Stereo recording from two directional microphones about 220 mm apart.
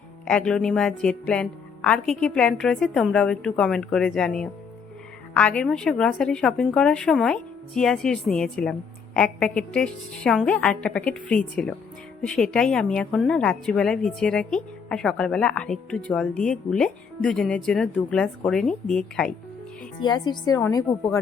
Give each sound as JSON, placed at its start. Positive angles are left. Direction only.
{"t": 0.3, "sound": "a woman's voice", "side_deg": 5}
{"t": 20.0, "sound": "a woman's voice", "side_deg": 20}